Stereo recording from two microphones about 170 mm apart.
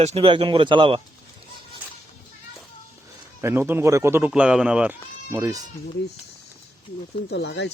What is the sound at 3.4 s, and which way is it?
Speech, 15° right (ahead or behind).